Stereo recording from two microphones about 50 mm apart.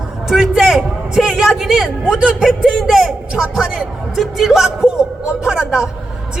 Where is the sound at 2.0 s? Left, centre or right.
Right.